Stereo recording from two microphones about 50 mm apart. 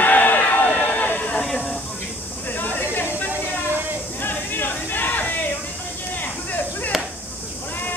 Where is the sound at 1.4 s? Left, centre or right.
Centre.